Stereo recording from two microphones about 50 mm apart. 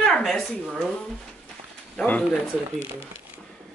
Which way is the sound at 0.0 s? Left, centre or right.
Centre.